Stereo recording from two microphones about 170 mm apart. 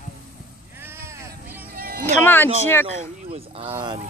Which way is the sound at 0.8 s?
15° right (ahead or behind).